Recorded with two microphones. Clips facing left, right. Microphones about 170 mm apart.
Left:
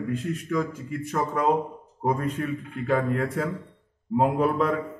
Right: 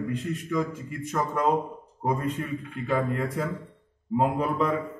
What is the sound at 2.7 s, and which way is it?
A man's voice, centre (ahead or behind).